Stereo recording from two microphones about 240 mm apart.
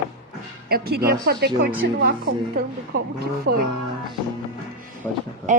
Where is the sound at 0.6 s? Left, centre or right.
Right.